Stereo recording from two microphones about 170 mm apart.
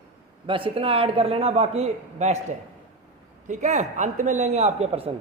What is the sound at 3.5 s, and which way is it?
A man's voice, 45° right (ahead or behind).